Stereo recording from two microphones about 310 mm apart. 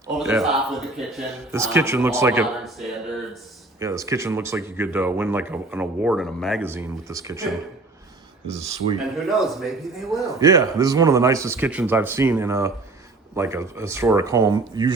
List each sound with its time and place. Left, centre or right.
0.2 s a man's voice: centre
8.4 s a man's voice: centre
10.4 s speech: centre